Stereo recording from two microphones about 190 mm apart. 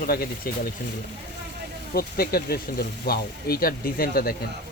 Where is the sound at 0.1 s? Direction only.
55° left (ahead or behind).